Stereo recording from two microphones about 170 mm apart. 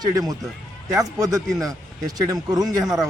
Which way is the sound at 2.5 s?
20° right (ahead or behind).